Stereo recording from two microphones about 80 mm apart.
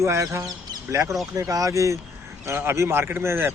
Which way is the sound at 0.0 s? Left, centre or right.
Right.